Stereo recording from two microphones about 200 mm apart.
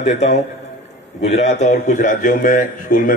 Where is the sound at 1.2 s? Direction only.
35° left (ahead or behind).